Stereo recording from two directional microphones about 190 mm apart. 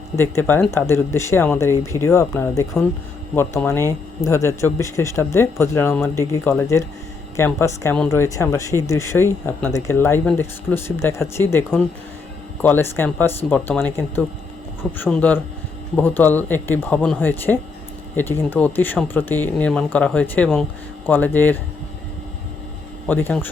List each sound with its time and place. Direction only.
0.2 s speech: 15° left (ahead or behind)
23.0 s speech: 10° left (ahead or behind)